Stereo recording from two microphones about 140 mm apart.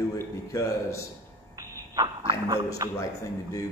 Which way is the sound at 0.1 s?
25° left (ahead or behind).